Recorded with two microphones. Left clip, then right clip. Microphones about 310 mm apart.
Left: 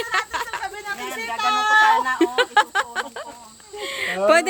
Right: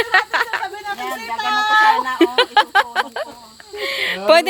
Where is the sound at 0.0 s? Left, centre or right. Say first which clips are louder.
Right 8 dB; centre.